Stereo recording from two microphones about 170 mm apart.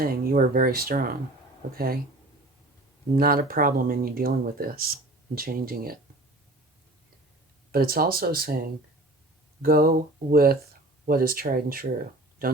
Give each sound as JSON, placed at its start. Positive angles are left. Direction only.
{"t": 0.0, "sound": "speech", "side_deg": -55}
{"t": 3.2, "sound": "speech", "side_deg": -60}
{"t": 7.7, "sound": "speech", "side_deg": -60}
{"t": 9.6, "sound": "speech", "side_deg": -60}